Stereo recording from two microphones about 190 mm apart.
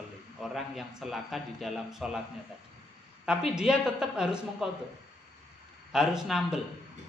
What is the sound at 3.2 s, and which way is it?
A man's voice, 5° right (ahead or behind).